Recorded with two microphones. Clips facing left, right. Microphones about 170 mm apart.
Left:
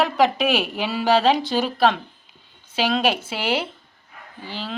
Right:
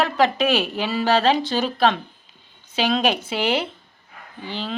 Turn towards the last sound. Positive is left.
turn(degrees=5)  # may be behind; listen again after turning